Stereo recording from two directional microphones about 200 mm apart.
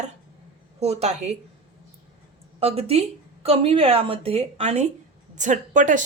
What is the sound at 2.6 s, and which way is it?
A woman's voice, 30° right (ahead or behind).